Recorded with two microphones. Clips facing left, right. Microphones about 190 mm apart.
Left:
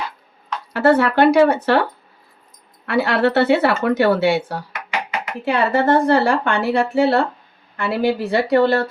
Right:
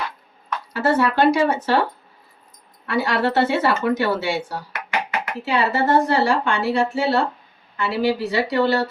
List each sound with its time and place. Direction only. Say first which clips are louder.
0.7 s speech: left 4 dB; 60° left (ahead or behind)
2.8 s speech: left 4 dB; 65° left (ahead or behind)